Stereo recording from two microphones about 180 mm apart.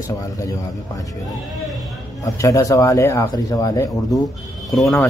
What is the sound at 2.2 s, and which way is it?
Speech, 20° left (ahead or behind).